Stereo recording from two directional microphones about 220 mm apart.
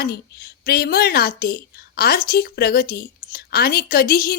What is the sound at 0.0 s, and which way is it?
A woman's voice, 45° left (ahead or behind).